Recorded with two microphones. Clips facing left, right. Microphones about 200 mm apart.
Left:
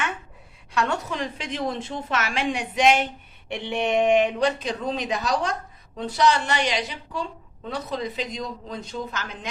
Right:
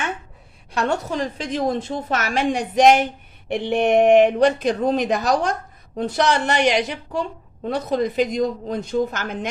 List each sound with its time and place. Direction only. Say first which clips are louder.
0.7 s a woman's voice: right 3 dB; 35° right (ahead or behind); by 9.5 s 55° right (ahead or behind)